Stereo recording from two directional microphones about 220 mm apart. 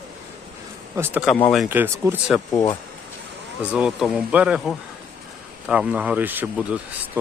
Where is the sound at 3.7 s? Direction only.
5° right (ahead or behind).